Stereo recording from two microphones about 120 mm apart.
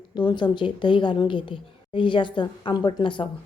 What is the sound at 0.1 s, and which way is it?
A woman's voice, 40° left (ahead or behind).